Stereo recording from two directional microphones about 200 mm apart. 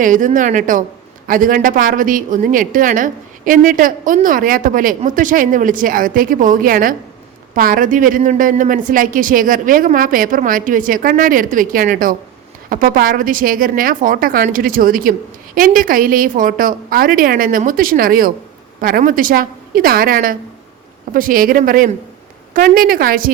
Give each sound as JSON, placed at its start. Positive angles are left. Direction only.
{"t": 0.0, "sound": "a woman's voice", "side_deg": -40}